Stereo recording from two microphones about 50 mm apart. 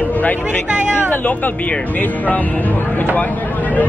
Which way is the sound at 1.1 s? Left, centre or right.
Left.